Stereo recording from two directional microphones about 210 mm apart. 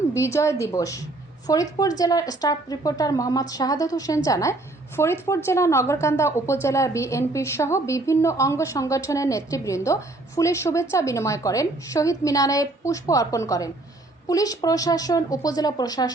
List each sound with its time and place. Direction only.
0.1 s speech: 15° left (ahead or behind)